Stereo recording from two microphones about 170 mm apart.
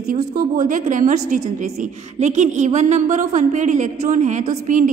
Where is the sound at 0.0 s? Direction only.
55° right (ahead or behind).